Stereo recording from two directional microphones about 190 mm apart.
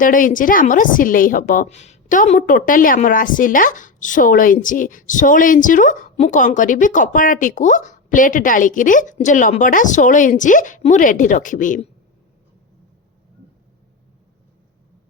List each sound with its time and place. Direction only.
0.0 s a woman's voice: 45° left (ahead or behind)